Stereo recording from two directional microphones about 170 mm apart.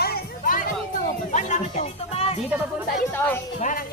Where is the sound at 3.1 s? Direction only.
10° left (ahead or behind).